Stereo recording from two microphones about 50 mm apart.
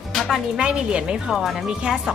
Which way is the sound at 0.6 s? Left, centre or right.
Right.